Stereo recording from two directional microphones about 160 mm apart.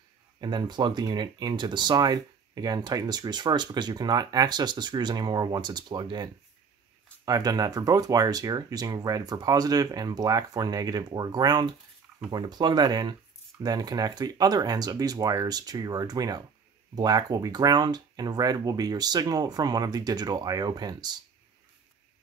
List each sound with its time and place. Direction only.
0.4 s speech: 25° right (ahead or behind)